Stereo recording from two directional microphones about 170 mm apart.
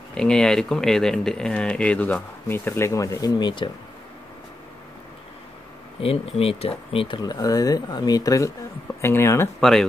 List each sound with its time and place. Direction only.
0.1 s speech: 5° left (ahead or behind); by 3.7 s 25° left (ahead or behind)
5.9 s speech: 35° left (ahead or behind); by 9.5 s 15° left (ahead or behind)
9.6 s speech: centre (ahead or behind)